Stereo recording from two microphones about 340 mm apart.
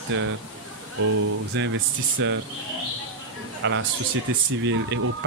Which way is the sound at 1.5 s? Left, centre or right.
Right.